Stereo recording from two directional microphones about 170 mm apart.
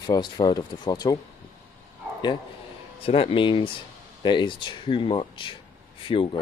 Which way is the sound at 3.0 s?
35° left (ahead or behind).